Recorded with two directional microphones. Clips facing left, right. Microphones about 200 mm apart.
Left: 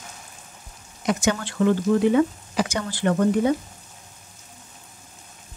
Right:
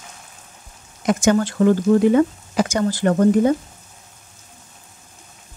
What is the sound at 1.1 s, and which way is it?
Speech, 45° right (ahead or behind).